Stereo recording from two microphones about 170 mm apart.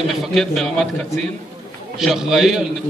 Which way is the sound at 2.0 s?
Centre (ahead or behind).